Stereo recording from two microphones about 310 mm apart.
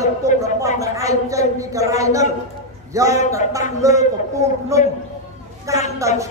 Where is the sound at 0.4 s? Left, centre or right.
Centre.